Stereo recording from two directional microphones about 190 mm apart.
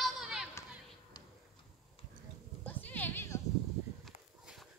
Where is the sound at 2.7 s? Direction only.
10° left (ahead or behind).